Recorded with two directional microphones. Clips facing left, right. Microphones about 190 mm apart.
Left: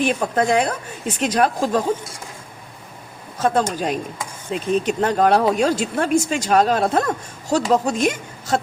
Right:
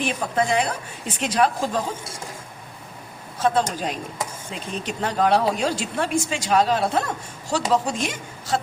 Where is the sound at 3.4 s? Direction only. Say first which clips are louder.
Left 2 dB; 45° left (ahead or behind).